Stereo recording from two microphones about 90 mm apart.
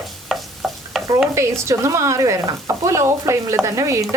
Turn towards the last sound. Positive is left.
turn(degrees=-35)  # may be behind; listen again after turning